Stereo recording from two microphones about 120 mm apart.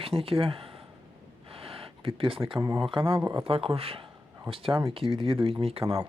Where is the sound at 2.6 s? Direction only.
25° right (ahead or behind).